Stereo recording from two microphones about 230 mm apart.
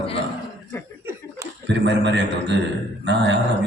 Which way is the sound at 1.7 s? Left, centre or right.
Right.